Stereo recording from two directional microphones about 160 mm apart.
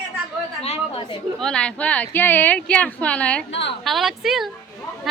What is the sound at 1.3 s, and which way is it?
Speech, 5° left (ahead or behind).